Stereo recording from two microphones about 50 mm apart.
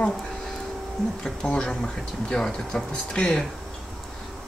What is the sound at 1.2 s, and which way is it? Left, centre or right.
Speech, centre.